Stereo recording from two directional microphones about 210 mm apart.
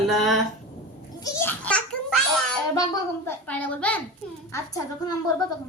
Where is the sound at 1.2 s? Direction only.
15° left (ahead or behind).